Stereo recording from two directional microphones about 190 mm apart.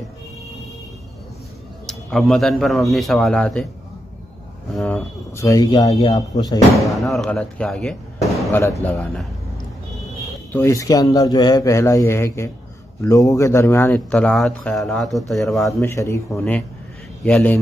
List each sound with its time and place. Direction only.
1.9 s a man's voice: 5° left (ahead or behind)
4.7 s speech: 5° left (ahead or behind)
5.9 s a man's voice: 30° left (ahead or behind)
6.1 s speech: 20° left (ahead or behind)
6.9 s a man's voice: centre (ahead or behind)
10.5 s speech: 15° left (ahead or behind)
15.8 s a man's voice: 15° left (ahead or behind)